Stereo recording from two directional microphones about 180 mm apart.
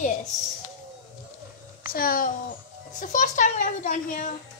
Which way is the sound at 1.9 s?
50° left (ahead or behind).